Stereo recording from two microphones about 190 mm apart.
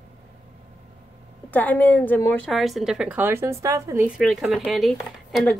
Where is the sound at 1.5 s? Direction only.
10° left (ahead or behind); by 4.1 s 15° right (ahead or behind).